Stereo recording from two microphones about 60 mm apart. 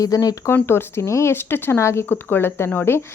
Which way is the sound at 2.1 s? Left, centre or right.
Left.